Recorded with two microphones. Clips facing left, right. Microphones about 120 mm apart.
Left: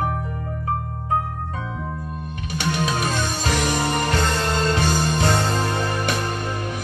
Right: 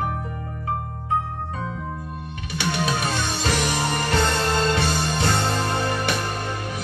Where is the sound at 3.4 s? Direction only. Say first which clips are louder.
Left 1 dB; 40° left (ahead or behind).